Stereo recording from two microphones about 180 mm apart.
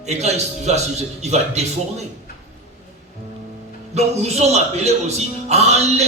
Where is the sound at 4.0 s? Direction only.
35° right (ahead or behind).